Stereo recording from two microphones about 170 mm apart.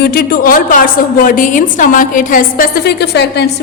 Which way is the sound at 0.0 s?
65° left (ahead or behind).